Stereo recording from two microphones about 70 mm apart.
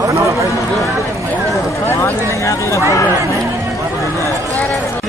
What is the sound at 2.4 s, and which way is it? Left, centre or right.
Speech, left.